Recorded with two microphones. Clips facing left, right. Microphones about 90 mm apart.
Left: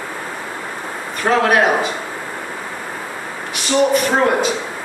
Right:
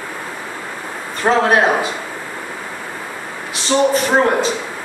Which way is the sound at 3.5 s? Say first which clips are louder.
Even; 30° right (ahead or behind).